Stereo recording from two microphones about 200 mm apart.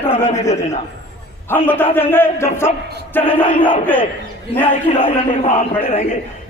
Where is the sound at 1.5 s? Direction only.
10° left (ahead or behind).